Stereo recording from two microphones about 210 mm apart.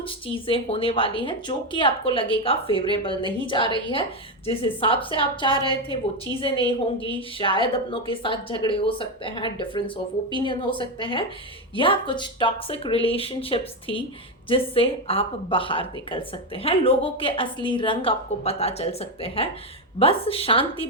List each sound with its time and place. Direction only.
0.0 s a woman's voice: 25° left (ahead or behind)